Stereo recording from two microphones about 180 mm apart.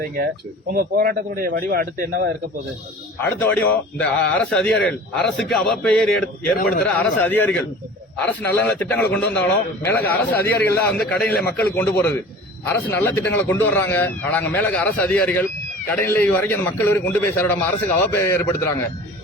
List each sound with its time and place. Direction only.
0.7 s speech: 55° right (ahead or behind)
3.2 s a man's voice: 10° left (ahead or behind)